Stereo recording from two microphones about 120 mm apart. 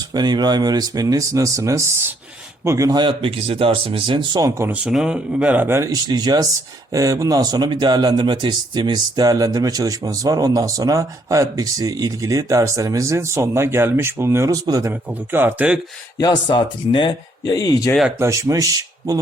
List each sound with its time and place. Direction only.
0.1 s speech: 35° right (ahead or behind)
3.0 s speech: 50° right (ahead or behind); by 4.7 s 25° right (ahead or behind)
4.7 s a man's voice: 5° right (ahead or behind)
5.6 s speech: 25° right (ahead or behind)
15.3 s a man's voice: 20° right (ahead or behind)
16.1 s speech: 35° left (ahead or behind)
17.4 s speech: 30° left (ahead or behind)
18.2 s speech: 25° right (ahead or behind)